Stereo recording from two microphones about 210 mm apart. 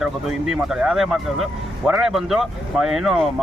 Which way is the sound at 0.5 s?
5° right (ahead or behind).